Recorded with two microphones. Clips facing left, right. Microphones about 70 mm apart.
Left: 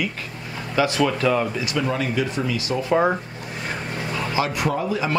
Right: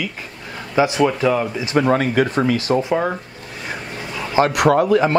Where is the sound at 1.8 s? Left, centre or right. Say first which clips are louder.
Right 8 dB; right.